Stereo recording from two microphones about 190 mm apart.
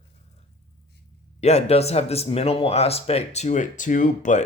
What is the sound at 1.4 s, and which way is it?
Speech, 35° left (ahead or behind).